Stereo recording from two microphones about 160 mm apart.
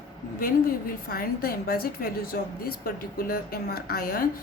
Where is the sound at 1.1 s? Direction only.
70° left (ahead or behind).